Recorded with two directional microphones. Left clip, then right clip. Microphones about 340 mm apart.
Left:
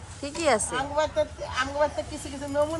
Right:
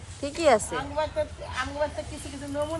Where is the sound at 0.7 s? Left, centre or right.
Left.